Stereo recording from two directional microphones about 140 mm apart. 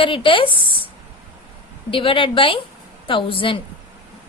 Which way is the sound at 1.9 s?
40° left (ahead or behind).